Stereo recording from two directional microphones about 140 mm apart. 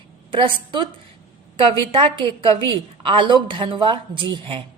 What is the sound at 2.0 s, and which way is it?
A woman's voice, 35° right (ahead or behind).